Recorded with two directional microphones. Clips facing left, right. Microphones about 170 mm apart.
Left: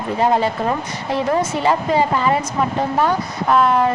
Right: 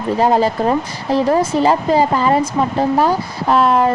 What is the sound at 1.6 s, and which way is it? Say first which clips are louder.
Speech: right 3 dB; 35° right (ahead or behind).